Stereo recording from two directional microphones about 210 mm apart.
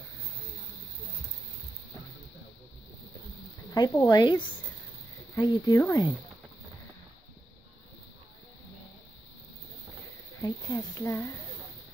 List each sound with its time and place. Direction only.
3.7 s speech: 15° left (ahead or behind)
10.4 s speech: 15° left (ahead or behind)